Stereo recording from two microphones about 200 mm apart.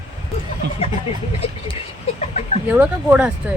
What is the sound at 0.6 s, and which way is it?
Speech, 55° right (ahead or behind).